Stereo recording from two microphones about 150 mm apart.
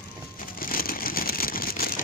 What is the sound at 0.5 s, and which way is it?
Vehicle, 75° left (ahead or behind).